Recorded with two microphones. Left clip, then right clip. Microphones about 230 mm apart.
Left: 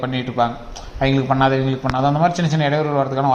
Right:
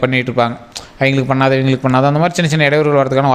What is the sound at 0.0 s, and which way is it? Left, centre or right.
A man's voice, right.